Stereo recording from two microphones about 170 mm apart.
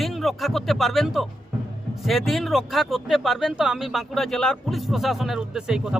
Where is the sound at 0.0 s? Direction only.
Centre (ahead or behind).